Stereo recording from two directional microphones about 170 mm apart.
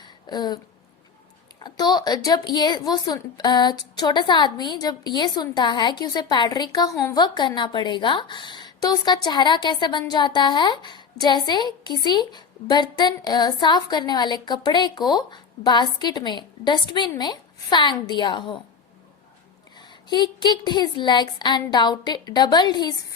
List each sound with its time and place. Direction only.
0.0 s a sound: 25° left (ahead or behind)
1.5 s a woman's voice: 25° left (ahead or behind)
19.7 s a woman's voice: 25° left (ahead or behind)